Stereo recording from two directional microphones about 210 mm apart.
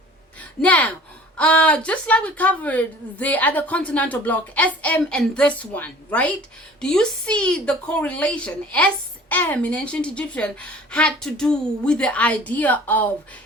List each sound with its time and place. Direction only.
0.6 s a woman's voice: 5° left (ahead or behind)